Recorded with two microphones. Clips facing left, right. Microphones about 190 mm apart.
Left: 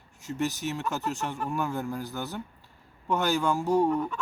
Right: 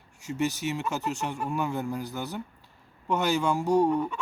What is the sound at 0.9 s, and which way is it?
Fowl, centre (ahead or behind).